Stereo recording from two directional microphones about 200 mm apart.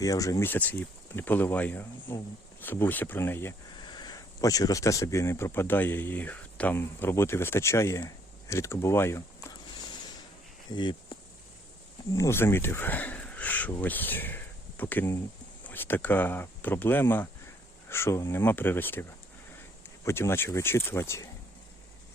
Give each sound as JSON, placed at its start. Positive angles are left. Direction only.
{"t": 0.0, "sound": "speech", "side_deg": 15}
{"t": 10.7, "sound": "speech", "side_deg": 25}
{"t": 20.1, "sound": "speech", "side_deg": 10}